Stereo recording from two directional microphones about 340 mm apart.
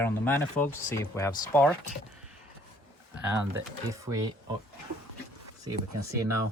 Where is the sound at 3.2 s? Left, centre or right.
Centre.